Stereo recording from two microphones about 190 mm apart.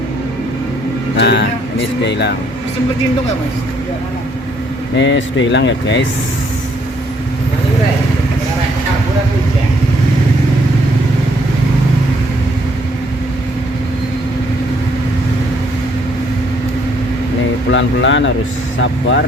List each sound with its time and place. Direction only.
1.1 s vehicle: 65° left (ahead or behind)
2.0 s speech: 65° left (ahead or behind)
4.9 s speech: 75° left (ahead or behind)
17.7 s speech: 80° left